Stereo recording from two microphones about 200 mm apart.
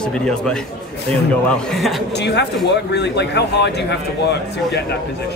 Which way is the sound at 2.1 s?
60° left (ahead or behind).